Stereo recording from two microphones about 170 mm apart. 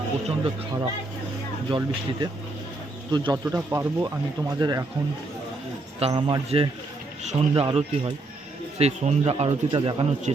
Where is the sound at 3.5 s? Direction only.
15° right (ahead or behind).